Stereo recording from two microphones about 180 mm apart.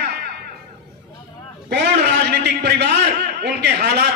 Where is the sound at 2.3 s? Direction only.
65° right (ahead or behind).